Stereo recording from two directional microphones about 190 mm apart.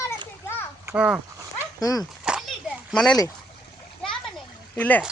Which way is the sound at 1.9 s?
Centre (ahead or behind).